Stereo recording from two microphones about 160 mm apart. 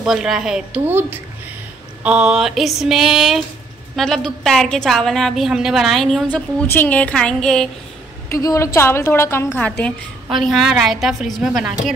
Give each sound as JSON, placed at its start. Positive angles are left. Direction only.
{"t": 0.0, "sound": "a woman's voice", "side_deg": 0}
{"t": 8.3, "sound": "a woman's voice", "side_deg": 20}